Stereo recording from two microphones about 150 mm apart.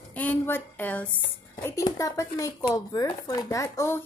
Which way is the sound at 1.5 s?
25° left (ahead or behind).